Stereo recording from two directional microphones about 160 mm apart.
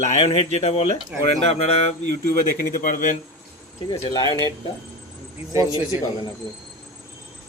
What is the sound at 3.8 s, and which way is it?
Speech, 40° left (ahead or behind).